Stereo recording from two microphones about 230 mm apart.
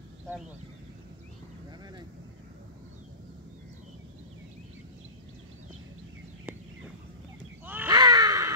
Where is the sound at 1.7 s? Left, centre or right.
Centre.